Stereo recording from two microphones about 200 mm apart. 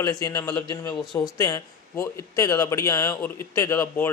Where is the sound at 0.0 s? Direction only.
15° left (ahead or behind).